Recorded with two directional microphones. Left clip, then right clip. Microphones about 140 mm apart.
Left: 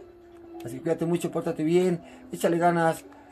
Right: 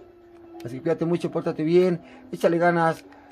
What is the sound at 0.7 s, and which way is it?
Speech, 60° right (ahead or behind).